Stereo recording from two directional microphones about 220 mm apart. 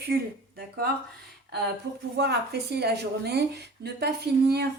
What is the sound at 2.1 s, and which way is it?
A woman's voice, 50° right (ahead or behind).